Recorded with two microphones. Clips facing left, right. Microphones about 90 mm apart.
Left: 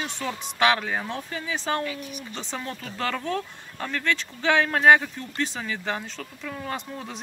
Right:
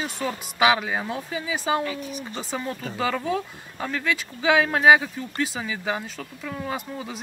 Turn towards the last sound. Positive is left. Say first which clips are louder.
# right 2 dB
turn(degrees=-5)  # may be behind; listen again after turning